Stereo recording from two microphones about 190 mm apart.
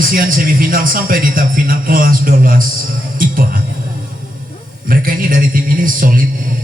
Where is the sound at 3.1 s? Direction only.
50° right (ahead or behind).